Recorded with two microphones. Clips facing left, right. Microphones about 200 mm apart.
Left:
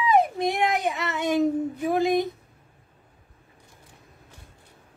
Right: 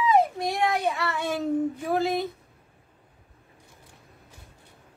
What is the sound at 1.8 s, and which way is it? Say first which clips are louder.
Speech: left 3 dB; 15° left (ahead or behind).